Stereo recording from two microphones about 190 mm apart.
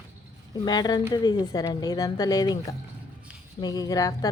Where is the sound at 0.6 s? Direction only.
20° left (ahead or behind).